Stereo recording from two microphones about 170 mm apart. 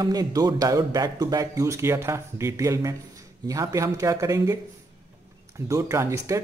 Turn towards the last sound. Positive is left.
turn(degrees=-15)  # may be behind; listen again after turning